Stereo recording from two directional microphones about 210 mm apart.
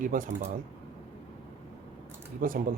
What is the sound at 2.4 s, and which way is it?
Speech, 40° right (ahead or behind).